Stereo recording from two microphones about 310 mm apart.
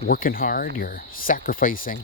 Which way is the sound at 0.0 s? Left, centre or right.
Left.